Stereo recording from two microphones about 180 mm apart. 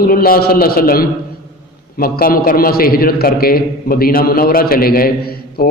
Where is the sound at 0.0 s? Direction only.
55° left (ahead or behind).